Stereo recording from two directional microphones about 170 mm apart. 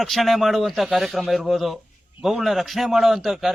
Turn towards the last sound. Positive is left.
turn(degrees=0)  # may be behind; listen again after turning